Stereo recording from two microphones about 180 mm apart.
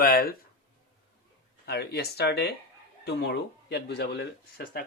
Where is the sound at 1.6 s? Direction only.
65° left (ahead or behind).